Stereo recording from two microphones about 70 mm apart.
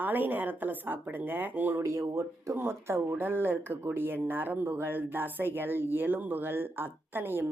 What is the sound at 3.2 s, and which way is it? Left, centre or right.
Speech, right.